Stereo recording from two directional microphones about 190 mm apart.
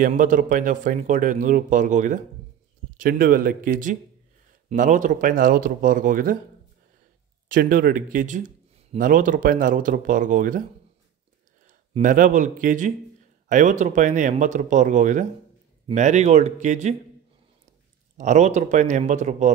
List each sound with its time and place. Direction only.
0.0 s a man's voice: 45° right (ahead or behind)
7.4 s a man's voice: 45° right (ahead or behind)
11.9 s a man's voice: 45° right (ahead or behind)
18.1 s speech: 40° right (ahead or behind)